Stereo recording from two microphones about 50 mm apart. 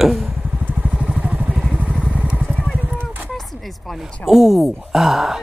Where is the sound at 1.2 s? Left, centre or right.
Right.